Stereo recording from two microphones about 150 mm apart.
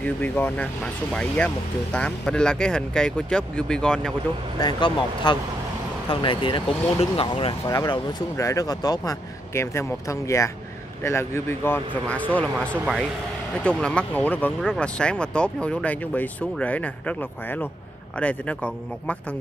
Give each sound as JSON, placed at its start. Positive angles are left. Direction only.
{"t": 0.0, "sound": "speech", "side_deg": 10}
{"t": 4.6, "sound": "speech", "side_deg": 30}
{"t": 7.6, "sound": "speech", "side_deg": 20}
{"t": 13.6, "sound": "speech", "side_deg": 5}